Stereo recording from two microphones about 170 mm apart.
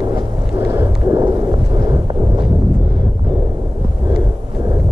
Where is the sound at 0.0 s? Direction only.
25° right (ahead or behind).